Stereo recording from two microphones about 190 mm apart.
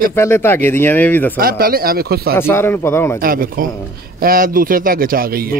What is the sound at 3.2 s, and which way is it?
Speech, 50° right (ahead or behind).